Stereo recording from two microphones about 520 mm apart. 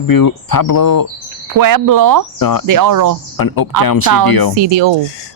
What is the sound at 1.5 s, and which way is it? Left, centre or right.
Speech, right.